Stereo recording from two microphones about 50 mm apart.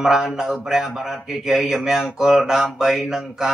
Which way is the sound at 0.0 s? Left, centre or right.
Centre.